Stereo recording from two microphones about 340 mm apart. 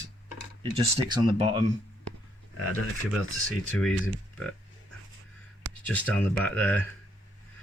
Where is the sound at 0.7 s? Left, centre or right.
Centre.